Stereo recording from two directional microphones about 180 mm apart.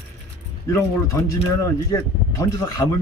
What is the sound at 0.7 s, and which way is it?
Speech, 15° left (ahead or behind).